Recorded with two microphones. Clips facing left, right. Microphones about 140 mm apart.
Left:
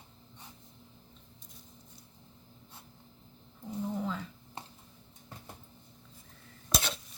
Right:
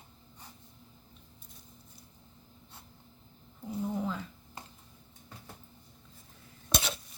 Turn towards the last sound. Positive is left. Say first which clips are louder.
# even
turn(degrees=0)  # may be behind; listen again after turning